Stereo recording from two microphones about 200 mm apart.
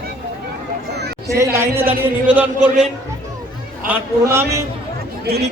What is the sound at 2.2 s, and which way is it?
A man's voice, 5° right (ahead or behind).